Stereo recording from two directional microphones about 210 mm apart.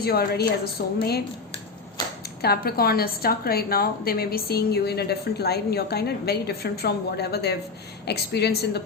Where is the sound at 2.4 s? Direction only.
45° left (ahead or behind).